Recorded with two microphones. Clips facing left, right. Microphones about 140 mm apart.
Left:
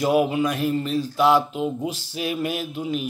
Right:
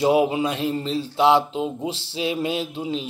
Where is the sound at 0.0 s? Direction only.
25° right (ahead or behind).